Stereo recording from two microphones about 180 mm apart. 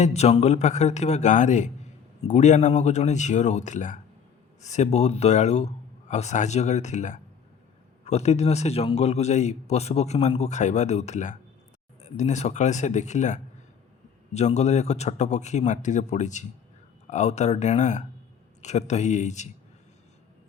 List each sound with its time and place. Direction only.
0.0 s a man's voice: 35° left (ahead or behind)